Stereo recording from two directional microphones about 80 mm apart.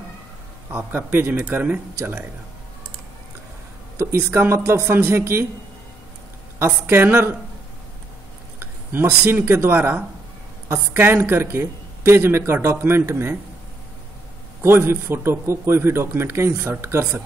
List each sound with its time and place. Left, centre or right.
0.7 s a woman's voice: right
3.9 s a man's voice: right
6.6 s a man's voice: right
8.5 s a woman's voice: right
14.6 s a man's voice: right